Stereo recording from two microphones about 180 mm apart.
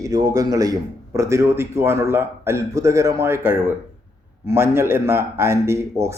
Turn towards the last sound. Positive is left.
turn(degrees=-15)  # may be behind; listen again after turning